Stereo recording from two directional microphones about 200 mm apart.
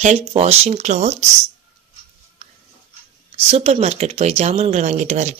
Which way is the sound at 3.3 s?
30° right (ahead or behind).